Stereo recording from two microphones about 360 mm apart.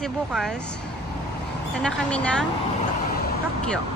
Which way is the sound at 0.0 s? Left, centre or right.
Centre.